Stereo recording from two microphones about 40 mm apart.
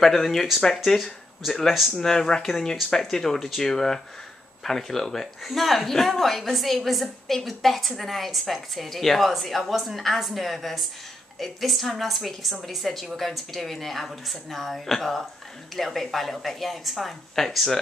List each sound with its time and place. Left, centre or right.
0.0 s speech: centre
1.7 s a woman's voice: centre
2.0 s a woman's voice: centre